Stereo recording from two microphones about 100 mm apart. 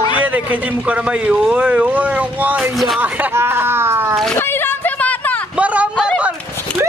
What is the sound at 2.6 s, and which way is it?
Speech, centre (ahead or behind).